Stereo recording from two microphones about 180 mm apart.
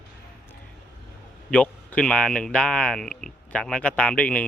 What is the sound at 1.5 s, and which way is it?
Speech, 5° left (ahead or behind).